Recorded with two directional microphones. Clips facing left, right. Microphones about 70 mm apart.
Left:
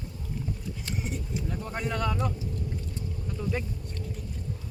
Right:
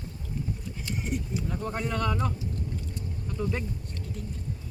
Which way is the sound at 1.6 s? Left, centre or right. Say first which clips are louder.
Right 1 dB; centre.